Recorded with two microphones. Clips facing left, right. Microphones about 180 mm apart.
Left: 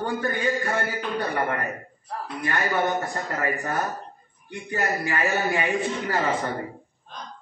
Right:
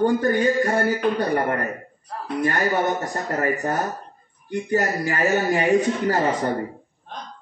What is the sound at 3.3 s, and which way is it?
A man's voice, 40° right (ahead or behind).